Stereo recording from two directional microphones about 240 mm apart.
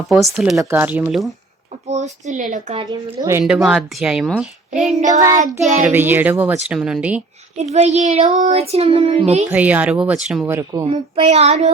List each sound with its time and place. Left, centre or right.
0.1 s a woman's voice: centre
0.5 s speech: centre
1.9 s child singing: right
3.2 s a woman's voice: centre
5.0 s speech: centre
7.5 s child singing: right
9.5 s speech: centre
10.9 s child singing: right